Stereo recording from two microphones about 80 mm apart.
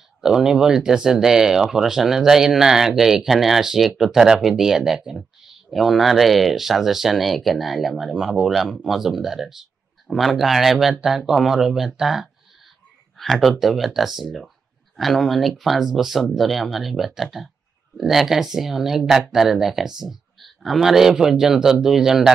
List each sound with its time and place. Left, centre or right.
0.2 s speech: centre